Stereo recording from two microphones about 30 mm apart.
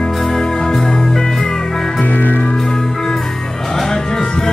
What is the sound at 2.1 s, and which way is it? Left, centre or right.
Music, left.